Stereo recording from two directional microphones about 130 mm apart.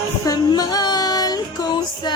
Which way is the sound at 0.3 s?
30° left (ahead or behind).